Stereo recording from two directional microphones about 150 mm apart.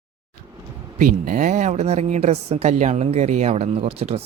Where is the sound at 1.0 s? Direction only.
60° right (ahead or behind).